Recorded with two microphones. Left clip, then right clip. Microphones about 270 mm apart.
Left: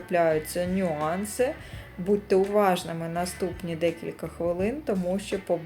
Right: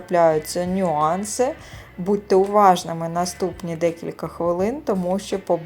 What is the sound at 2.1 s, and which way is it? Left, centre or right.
Speech, centre.